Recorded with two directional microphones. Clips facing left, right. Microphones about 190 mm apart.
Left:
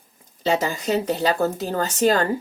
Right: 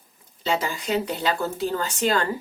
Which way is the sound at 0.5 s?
45° left (ahead or behind).